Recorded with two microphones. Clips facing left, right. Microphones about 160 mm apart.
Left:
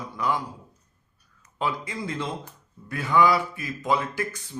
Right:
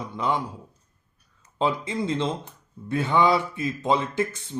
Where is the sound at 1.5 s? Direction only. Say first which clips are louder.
Right 4 dB; 25° right (ahead or behind).